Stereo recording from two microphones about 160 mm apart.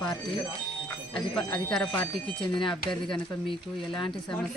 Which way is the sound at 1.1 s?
5° left (ahead or behind).